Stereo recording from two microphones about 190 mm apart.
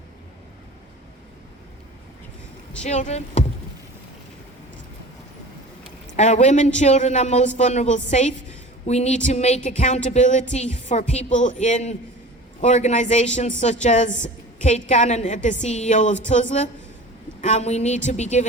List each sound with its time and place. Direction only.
2.8 s a woman's voice: 35° left (ahead or behind)
6.1 s a woman's voice: 35° left (ahead or behind)